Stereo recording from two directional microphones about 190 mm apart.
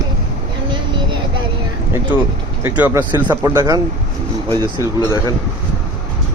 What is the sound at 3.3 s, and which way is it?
Speech, 20° right (ahead or behind).